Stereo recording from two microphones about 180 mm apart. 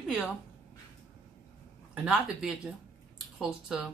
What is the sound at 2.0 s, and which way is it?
Speech, 5° right (ahead or behind).